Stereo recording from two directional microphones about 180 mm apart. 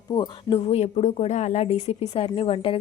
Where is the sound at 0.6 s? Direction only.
35° left (ahead or behind).